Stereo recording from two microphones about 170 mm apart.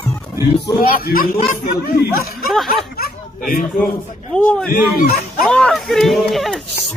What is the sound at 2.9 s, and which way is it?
Chatter, 60° left (ahead or behind).